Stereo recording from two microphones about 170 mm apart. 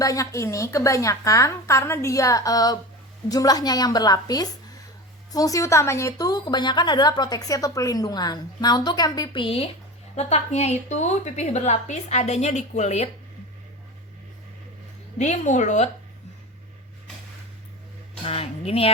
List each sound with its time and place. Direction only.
0.0 s a woman's voice: 20° left (ahead or behind); by 13.1 s 40° left (ahead or behind)
15.2 s a woman's voice: 45° left (ahead or behind)
18.3 s a woman's voice: 35° left (ahead or behind)